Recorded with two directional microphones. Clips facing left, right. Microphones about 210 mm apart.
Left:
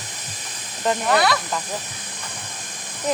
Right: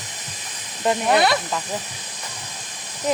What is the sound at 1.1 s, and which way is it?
Speech, 25° right (ahead or behind).